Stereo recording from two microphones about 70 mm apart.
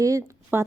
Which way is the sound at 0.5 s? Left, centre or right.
Right.